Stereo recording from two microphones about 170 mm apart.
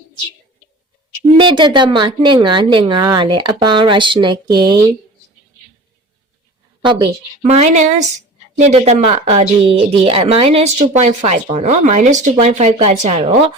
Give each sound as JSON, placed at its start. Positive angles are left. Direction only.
{"t": 1.4, "sound": "a woman's voice", "side_deg": -25}
{"t": 7.4, "sound": "speech", "side_deg": -40}